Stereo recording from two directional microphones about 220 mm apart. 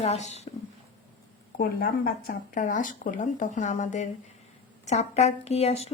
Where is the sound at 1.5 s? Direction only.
40° left (ahead or behind).